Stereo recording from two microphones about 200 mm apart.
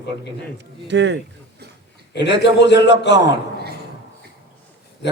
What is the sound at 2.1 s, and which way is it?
A man's voice, 60° left (ahead or behind).